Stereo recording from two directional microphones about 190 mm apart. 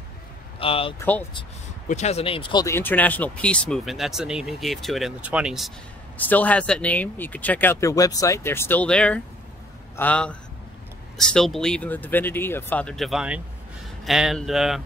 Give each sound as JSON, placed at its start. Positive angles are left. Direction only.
{"t": 0.6, "sound": "speech", "side_deg": 30}
{"t": 0.9, "sound": "speech", "side_deg": 10}
{"t": 1.9, "sound": "speech", "side_deg": 35}
{"t": 2.6, "sound": "speech", "side_deg": 10}
{"t": 6.1, "sound": "speech", "side_deg": 10}